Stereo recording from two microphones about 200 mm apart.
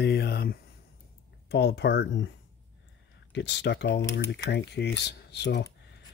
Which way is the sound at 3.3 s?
60° left (ahead or behind).